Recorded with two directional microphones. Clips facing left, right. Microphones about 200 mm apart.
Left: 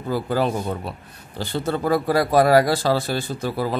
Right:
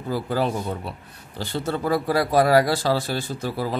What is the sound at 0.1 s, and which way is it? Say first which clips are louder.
A man's voice: left 2 dB; 50° left (ahead or behind).